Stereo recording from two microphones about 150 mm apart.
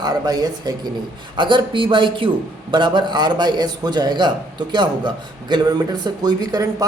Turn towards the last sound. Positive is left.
turn(degrees=-25)  # may be behind; listen again after turning